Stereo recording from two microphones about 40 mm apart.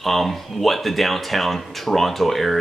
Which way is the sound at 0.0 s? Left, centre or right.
Centre.